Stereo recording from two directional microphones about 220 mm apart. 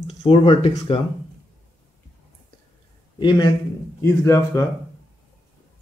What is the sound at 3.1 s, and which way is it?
A man's voice, 20° left (ahead or behind).